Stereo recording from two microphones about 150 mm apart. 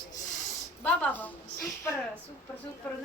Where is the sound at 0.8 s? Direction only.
10° left (ahead or behind).